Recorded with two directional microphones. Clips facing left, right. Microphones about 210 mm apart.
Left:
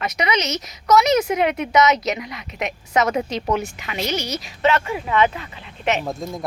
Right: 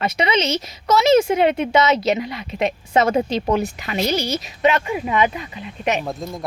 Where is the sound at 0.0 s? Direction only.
30° right (ahead or behind).